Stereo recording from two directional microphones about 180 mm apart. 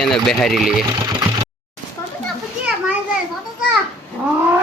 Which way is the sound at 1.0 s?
20° right (ahead or behind).